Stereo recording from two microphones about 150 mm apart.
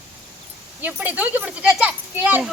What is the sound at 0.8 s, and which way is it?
A child's voice, 10° right (ahead or behind).